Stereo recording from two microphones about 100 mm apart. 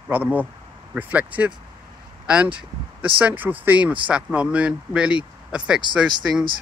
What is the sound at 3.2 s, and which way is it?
Speech, 15° right (ahead or behind).